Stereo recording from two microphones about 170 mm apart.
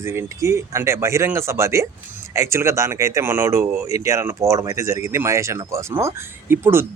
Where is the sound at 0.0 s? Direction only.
15° right (ahead or behind).